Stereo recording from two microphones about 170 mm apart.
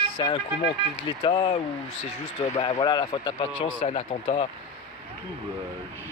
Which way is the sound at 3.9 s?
40° left (ahead or behind).